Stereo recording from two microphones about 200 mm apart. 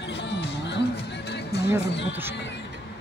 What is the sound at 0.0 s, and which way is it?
Music, 60° left (ahead or behind).